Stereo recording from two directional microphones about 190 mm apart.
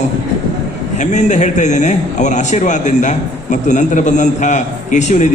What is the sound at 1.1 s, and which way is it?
A man's voice, 40° left (ahead or behind).